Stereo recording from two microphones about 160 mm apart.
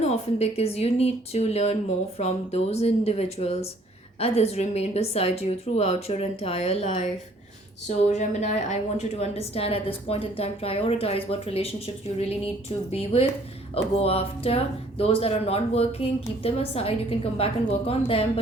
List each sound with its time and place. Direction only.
0.0 s a woman's voice: 40° left (ahead or behind)